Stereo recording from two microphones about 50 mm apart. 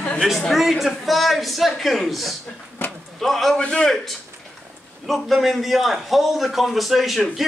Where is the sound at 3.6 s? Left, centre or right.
Centre.